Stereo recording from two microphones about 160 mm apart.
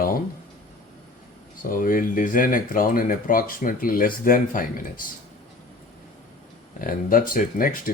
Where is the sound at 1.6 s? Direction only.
60° left (ahead or behind).